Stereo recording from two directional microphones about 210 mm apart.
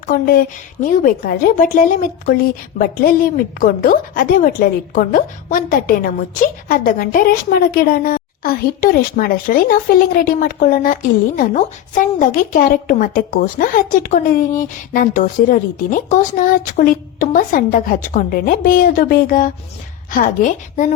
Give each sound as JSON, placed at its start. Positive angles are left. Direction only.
{"t": 0.8, "sound": "a woman's voice", "side_deg": 40}